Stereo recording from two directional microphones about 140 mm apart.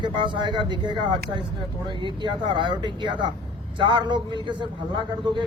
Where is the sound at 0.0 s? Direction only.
35° right (ahead or behind).